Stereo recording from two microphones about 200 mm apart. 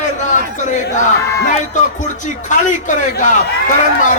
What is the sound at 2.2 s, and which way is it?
Speech, 40° left (ahead or behind).